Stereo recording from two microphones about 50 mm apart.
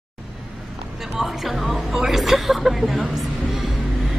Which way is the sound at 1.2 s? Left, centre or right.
Centre.